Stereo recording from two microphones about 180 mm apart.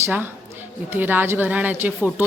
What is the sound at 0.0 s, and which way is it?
A woman's voice, 10° right (ahead or behind).